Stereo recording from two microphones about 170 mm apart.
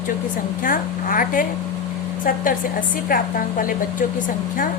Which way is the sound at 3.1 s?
55° left (ahead or behind).